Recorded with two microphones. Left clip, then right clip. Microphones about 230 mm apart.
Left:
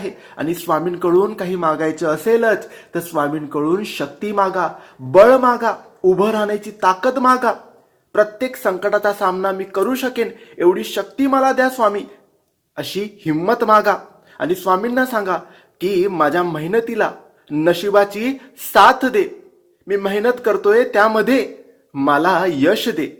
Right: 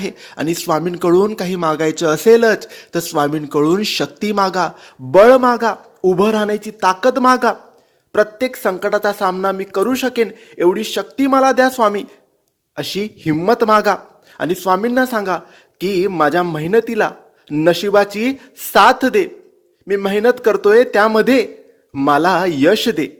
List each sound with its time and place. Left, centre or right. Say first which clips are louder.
0.0 s speech: right 2 dB; right
2.0 s speech: right 5 dB; right